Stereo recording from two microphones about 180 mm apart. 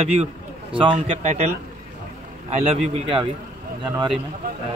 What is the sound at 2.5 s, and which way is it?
Speech, 35° right (ahead or behind).